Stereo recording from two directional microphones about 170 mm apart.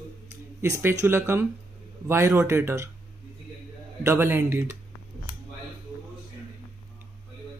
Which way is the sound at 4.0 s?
15° right (ahead or behind).